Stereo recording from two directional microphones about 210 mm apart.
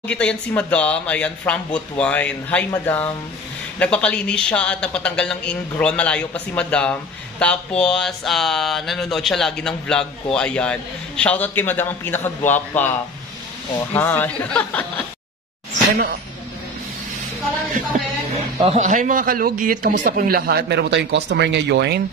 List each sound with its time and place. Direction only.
0.1 s a man's voice: 5° left (ahead or behind)
13.9 s speech: 10° left (ahead or behind)
18.6 s a man's voice: 30° right (ahead or behind); by 22.0 s 55° right (ahead or behind)